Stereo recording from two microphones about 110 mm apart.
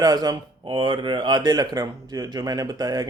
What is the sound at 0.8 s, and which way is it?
Speech, 50° right (ahead or behind).